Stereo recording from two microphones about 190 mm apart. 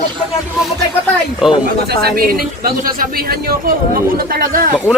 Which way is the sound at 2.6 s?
50° right (ahead or behind).